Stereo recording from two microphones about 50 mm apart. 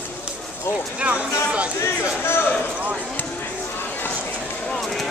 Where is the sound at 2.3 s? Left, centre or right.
Left.